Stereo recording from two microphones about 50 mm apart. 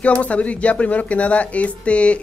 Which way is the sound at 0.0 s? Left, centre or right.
Left.